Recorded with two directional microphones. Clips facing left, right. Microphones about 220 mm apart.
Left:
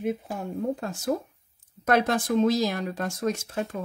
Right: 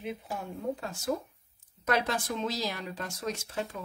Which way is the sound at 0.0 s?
50° left (ahead or behind).